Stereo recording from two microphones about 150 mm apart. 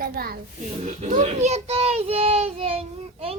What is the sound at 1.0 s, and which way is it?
A child's voice, 55° right (ahead or behind).